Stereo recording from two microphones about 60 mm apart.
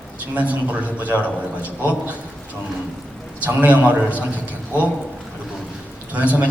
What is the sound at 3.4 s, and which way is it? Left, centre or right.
Speech, right.